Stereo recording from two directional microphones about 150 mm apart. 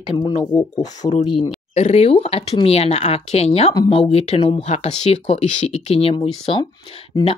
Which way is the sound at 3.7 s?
35° left (ahead or behind).